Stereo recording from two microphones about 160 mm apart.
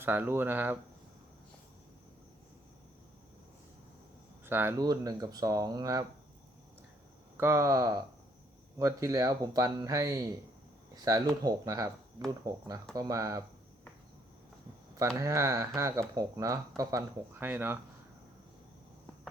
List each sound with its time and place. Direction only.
0.0 s speech: 15° right (ahead or behind)
4.4 s speech: 15° right (ahead or behind)
4.8 s speech: 25° right (ahead or behind)
7.3 s speech: 15° right (ahead or behind)
14.9 s speech: 20° right (ahead or behind)